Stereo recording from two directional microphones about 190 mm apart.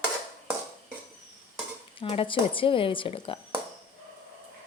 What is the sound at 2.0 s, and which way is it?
Speech, 30° left (ahead or behind).